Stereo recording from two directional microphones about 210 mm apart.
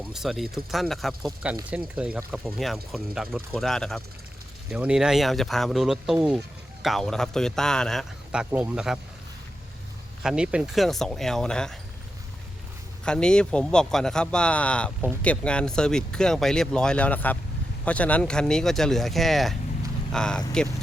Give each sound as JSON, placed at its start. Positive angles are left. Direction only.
{"t": 0.0, "sound": "speech", "side_deg": 0}
{"t": 10.2, "sound": "speech", "side_deg": -5}
{"t": 13.1, "sound": "speech", "side_deg": 5}